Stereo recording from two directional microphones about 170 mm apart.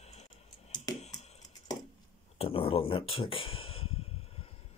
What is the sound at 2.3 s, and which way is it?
Speech, 35° left (ahead or behind).